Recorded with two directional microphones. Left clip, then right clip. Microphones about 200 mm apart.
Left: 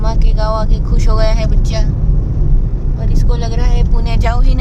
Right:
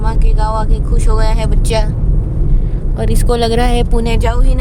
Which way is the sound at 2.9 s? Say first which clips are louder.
Right 10 dB; 45° right (ahead or behind).